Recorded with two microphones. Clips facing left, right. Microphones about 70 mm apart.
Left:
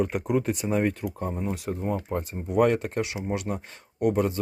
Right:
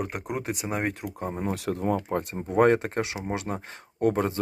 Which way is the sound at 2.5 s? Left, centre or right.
Right.